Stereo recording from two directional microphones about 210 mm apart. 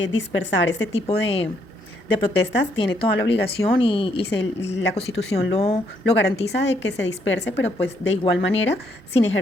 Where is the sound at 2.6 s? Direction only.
60° left (ahead or behind).